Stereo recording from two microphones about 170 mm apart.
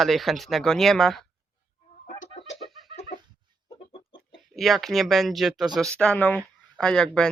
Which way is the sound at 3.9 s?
30° left (ahead or behind).